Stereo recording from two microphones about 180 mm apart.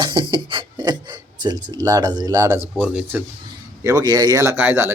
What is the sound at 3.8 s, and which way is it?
Speech, 20° right (ahead or behind).